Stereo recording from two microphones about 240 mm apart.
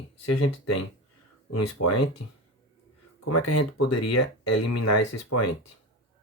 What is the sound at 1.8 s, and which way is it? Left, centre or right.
Speech, left.